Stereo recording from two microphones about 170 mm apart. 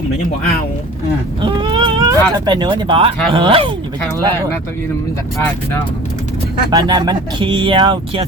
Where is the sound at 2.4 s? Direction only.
25° right (ahead or behind).